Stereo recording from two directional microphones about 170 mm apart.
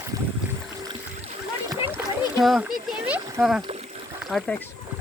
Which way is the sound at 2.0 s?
5° right (ahead or behind).